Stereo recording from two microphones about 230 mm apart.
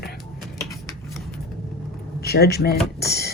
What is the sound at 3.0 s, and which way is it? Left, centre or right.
Music, left.